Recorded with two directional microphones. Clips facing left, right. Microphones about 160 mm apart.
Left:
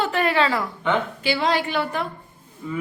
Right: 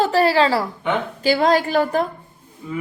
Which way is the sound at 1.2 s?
45° right (ahead or behind).